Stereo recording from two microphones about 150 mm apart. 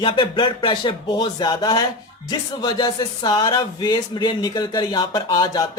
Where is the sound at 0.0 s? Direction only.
30° left (ahead or behind).